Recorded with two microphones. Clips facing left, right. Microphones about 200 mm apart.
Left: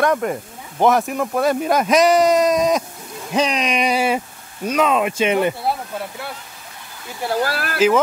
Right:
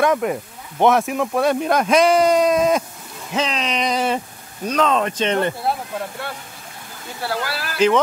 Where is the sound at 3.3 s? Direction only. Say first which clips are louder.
Left 3 dB; 15° left (ahead or behind).